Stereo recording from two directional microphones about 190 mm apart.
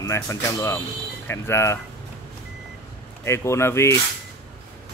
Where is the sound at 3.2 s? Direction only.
15° left (ahead or behind).